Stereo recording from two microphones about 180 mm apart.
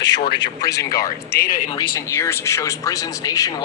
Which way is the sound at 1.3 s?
55° left (ahead or behind).